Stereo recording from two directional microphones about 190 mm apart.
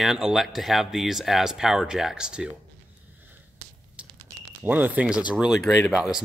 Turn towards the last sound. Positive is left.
turn(degrees=-5)  # may be behind; listen again after turning